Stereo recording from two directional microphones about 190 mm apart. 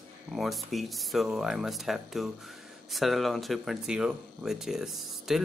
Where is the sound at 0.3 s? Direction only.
Centre (ahead or behind).